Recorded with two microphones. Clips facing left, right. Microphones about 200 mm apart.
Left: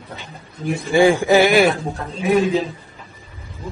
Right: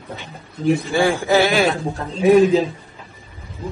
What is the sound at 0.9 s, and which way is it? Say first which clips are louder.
Speech: left 8 dB; 15° left (ahead or behind).